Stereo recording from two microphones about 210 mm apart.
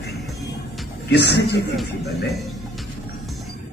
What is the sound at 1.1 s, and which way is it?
Speech, 50° left (ahead or behind).